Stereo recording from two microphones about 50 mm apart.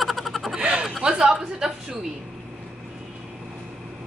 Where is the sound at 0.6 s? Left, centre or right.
Centre.